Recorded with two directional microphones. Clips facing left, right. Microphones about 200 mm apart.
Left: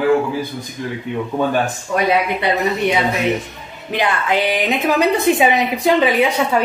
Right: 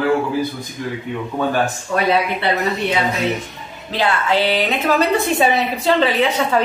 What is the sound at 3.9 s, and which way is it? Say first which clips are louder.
A woman's voice: even; 15° left (ahead or behind).